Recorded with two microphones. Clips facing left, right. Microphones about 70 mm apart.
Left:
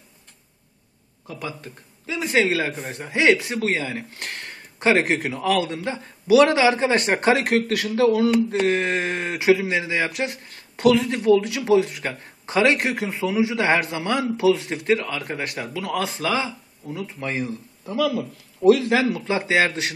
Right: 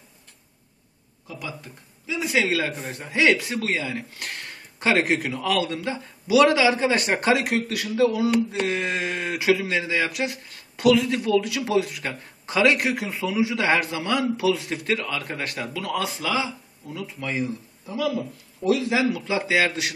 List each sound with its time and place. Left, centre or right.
1.2 s speech: left
3.1 s speech: left
7.4 s speech: left
8.6 s speech: left
17.9 s speech: left
19.1 s speech: left